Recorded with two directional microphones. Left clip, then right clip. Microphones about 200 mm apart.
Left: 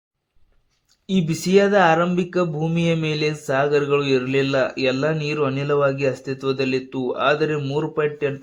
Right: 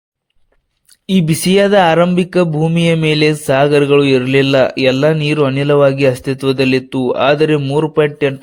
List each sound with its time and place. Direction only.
1.0 s speech: 35° right (ahead or behind)
7.6 s a man's voice: 25° right (ahead or behind)
7.9 s speech: 40° right (ahead or behind)